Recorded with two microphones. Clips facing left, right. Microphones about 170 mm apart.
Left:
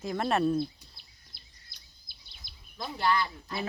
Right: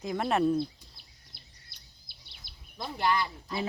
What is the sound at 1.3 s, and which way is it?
Bird vocalization, 60° right (ahead or behind).